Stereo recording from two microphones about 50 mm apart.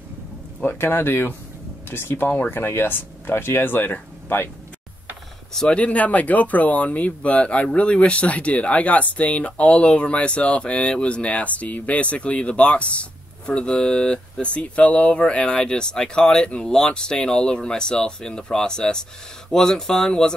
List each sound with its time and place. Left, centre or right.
0.7 s speech: left
5.7 s speech: left